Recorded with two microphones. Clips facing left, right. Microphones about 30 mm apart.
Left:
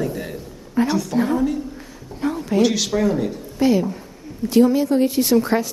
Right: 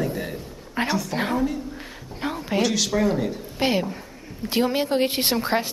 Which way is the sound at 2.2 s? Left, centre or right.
Right.